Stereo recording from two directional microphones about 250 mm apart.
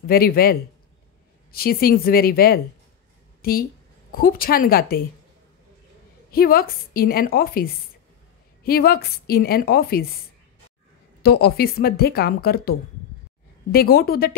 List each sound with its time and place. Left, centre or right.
0.0 s speech: left
6.3 s speech: left
11.2 s speech: left